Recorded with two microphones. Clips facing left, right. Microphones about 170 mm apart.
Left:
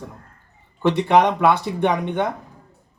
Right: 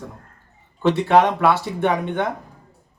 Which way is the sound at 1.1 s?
15° left (ahead or behind).